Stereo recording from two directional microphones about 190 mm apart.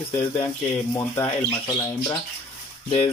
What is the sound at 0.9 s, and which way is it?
Speech, 15° left (ahead or behind).